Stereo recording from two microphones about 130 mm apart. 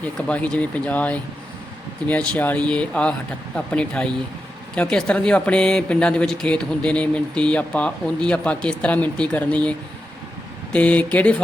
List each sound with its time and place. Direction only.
0.0 s speech: 10° left (ahead or behind)